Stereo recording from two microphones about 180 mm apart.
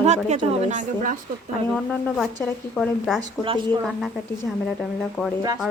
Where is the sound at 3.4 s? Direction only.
25° right (ahead or behind).